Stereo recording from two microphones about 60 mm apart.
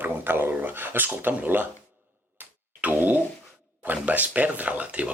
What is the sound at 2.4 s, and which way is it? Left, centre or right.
Grunt, right.